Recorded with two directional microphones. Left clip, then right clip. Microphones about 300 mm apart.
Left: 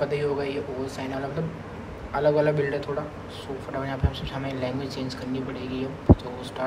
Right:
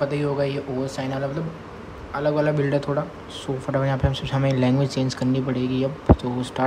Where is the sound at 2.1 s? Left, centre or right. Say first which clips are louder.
Even; centre.